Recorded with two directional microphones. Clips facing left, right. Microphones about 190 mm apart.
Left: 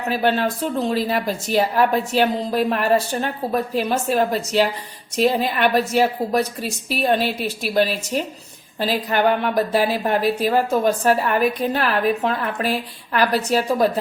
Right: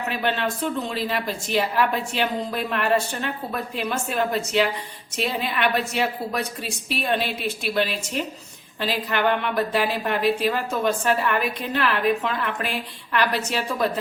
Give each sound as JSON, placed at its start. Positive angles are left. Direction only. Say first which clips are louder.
{"t": 0.1, "sound": "a woman's voice", "louder": "left 7 dB", "side_deg": 35}